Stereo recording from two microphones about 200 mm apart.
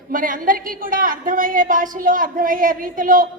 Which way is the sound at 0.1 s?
40° right (ahead or behind).